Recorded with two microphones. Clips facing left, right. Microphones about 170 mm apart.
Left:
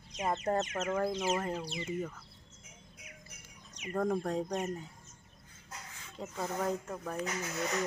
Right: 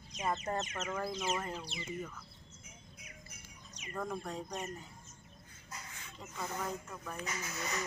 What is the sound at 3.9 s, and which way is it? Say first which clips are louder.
Speech: left 8 dB; 45° left (ahead or behind).